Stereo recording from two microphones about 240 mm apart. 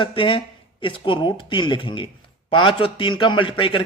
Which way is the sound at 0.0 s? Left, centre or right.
Left.